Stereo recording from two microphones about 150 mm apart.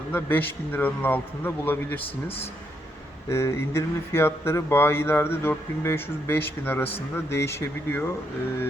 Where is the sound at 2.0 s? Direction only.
40° left (ahead or behind).